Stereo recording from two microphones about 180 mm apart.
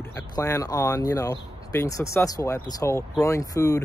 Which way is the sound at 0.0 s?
15° left (ahead or behind).